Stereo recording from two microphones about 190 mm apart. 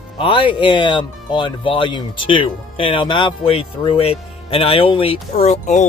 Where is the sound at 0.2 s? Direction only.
25° left (ahead or behind).